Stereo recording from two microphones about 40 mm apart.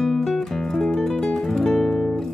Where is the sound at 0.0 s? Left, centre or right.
Centre.